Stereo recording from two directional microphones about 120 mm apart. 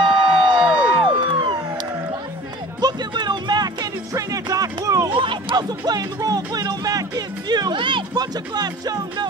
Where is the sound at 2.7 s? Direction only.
35° right (ahead or behind).